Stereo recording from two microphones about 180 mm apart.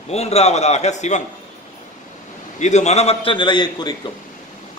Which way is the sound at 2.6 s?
40° left (ahead or behind).